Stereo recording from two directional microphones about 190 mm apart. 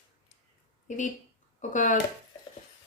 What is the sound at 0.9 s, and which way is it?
Speech, 40° left (ahead or behind).